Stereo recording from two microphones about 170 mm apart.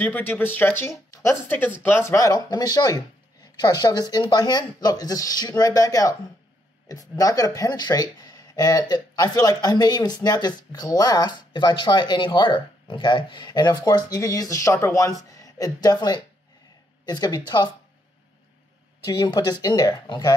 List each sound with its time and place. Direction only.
0.0 s speech: 10° left (ahead or behind)
19.0 s speech: 20° left (ahead or behind)